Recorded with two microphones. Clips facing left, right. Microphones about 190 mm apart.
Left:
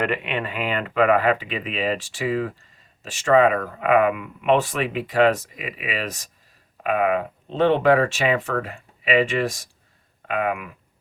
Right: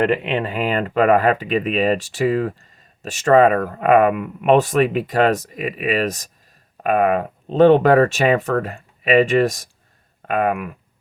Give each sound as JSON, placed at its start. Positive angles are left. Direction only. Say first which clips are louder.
{"t": 0.0, "sound": "speech", "louder": "right 6 dB", "side_deg": -30}